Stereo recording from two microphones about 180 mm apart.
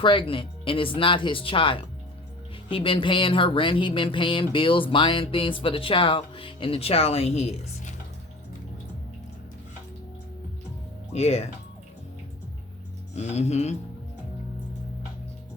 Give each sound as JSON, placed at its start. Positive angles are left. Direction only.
{"t": 0.0, "sound": "speech", "side_deg": 30}
{"t": 11.1, "sound": "speech", "side_deg": 35}
{"t": 13.1, "sound": "speech", "side_deg": 40}